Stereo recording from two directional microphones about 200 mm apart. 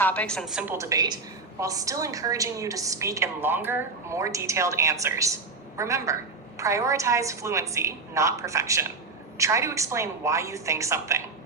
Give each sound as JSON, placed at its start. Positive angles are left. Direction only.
{"t": 0.0, "sound": "a woman's voice", "side_deg": 5}